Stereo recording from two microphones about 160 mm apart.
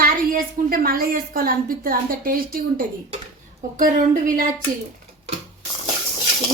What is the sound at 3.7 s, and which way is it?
Speech, 60° right (ahead or behind).